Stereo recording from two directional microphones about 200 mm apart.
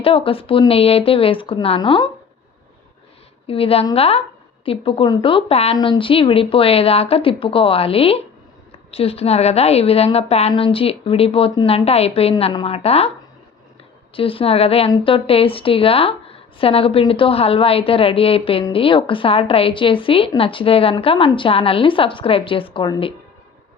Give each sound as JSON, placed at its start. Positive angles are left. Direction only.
{"t": 0.0, "sound": "a woman's voice", "side_deg": 25}
{"t": 3.4, "sound": "a woman's voice", "side_deg": 30}
{"t": 14.2, "sound": "a woman's voice", "side_deg": 25}